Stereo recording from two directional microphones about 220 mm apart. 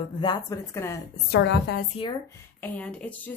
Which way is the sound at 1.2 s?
50° left (ahead or behind).